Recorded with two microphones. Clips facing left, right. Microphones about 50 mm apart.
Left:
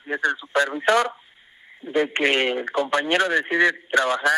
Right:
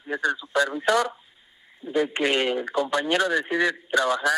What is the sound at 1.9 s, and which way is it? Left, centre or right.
Speech, left.